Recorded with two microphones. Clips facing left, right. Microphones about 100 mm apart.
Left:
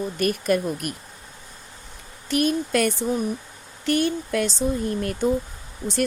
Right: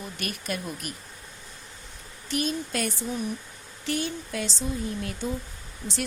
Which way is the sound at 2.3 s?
60° left (ahead or behind).